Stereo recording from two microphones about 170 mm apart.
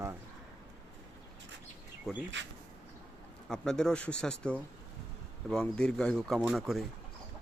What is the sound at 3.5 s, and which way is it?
Speech, 5° left (ahead or behind).